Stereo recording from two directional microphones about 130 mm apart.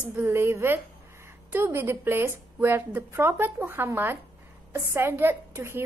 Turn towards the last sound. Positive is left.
turn(degrees=-20)  # may be behind; listen again after turning